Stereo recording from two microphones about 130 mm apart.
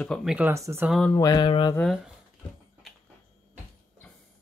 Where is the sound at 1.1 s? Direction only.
30° left (ahead or behind).